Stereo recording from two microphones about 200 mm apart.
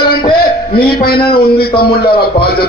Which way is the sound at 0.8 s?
50° left (ahead or behind).